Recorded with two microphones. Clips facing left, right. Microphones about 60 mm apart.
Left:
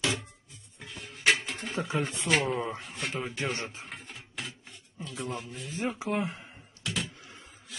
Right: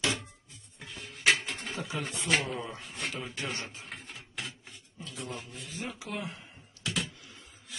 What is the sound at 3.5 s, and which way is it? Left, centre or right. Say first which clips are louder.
Speech: left 4 dB; left.